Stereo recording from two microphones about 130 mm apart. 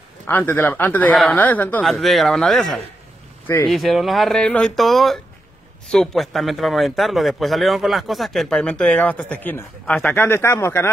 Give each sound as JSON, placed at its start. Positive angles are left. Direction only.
{"t": 0.3, "sound": "speech", "side_deg": 15}
{"t": 1.9, "sound": "a man's voice", "side_deg": 0}